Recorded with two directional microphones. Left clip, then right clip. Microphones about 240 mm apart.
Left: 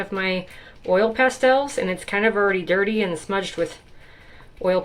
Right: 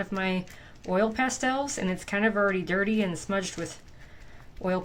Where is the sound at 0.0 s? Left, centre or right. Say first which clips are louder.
Left 6 dB; right.